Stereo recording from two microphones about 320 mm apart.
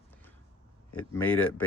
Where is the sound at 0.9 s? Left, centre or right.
Centre.